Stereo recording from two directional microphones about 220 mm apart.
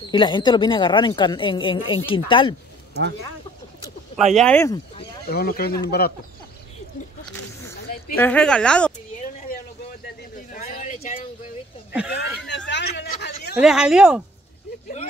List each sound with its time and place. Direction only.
0.1 s speech: 20° left (ahead or behind)
4.4 s a woman's voice: 5° left (ahead or behind)
5.3 s speech: 45° left (ahead or behind)
8.2 s a woman's voice: 5° left (ahead or behind)
10.3 s vehicle: 35° left (ahead or behind)
12.1 s a sound: 50° left (ahead or behind)
13.6 s a woman's voice: 5° right (ahead or behind)